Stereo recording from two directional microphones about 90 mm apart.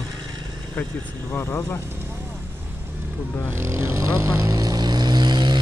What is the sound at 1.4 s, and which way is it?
Speech, 30° left (ahead or behind).